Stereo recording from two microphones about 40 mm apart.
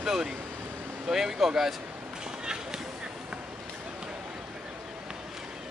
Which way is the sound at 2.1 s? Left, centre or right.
Centre.